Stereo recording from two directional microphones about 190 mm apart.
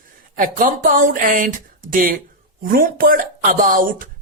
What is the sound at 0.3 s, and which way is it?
Speech, 45° right (ahead or behind).